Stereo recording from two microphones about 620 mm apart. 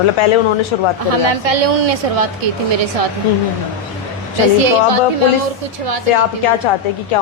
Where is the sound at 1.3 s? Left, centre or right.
Right.